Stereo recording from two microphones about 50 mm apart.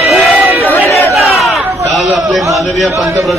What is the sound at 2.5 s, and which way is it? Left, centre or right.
Speech, centre.